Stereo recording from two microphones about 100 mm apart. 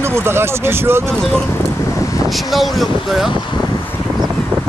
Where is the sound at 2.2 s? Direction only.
Centre (ahead or behind).